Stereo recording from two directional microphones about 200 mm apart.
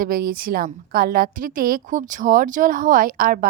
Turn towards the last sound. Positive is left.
turn(degrees=-45)  # may be behind; listen again after turning